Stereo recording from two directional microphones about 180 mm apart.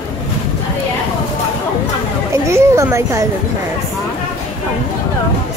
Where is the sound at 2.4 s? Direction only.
15° right (ahead or behind).